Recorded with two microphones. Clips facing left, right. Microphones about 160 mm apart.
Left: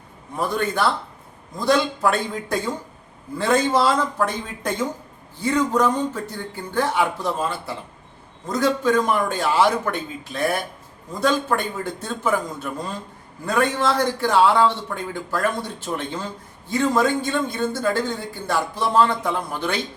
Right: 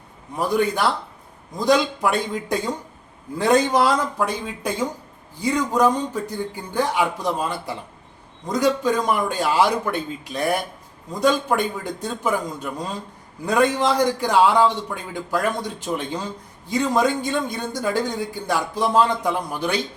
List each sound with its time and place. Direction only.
1.6 s a man's voice: 15° right (ahead or behind)